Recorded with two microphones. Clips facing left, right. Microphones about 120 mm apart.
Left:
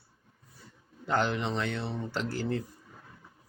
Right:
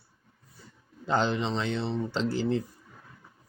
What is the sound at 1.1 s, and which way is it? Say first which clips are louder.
Mantra: right 2 dB; 15° right (ahead or behind).